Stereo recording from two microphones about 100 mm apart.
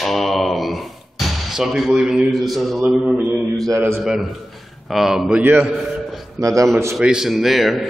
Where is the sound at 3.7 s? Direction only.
25° right (ahead or behind).